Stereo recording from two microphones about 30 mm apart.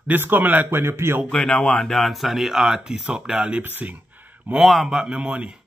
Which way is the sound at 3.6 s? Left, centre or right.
Right.